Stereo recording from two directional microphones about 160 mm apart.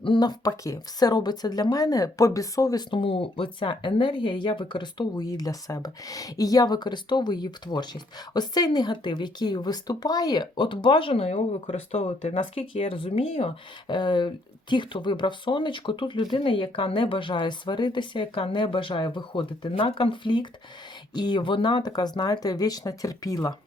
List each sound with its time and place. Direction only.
0.0 s speech: 30° left (ahead or behind)